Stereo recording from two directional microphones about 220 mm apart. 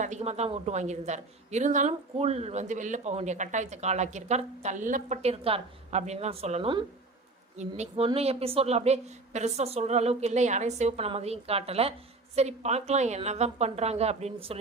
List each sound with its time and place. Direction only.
0.0 s a woman's voice: 30° right (ahead or behind)